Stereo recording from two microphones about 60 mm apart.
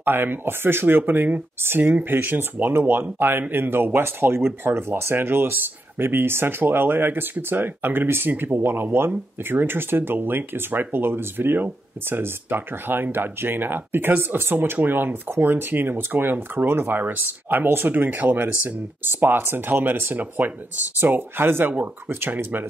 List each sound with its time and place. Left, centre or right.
0.0 s speech: right